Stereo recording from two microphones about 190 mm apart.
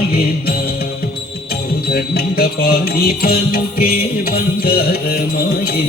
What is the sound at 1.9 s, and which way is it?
Music, 55° left (ahead or behind).